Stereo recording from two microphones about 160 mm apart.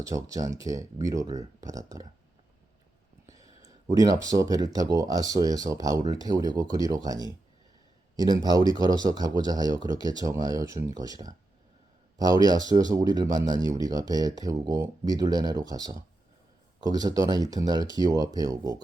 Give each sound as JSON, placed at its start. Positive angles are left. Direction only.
{"t": 0.0, "sound": "speech", "side_deg": -20}
{"t": 3.2, "sound": "speech", "side_deg": -20}